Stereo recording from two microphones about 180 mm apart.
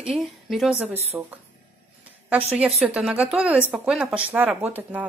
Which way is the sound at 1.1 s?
20° right (ahead or behind).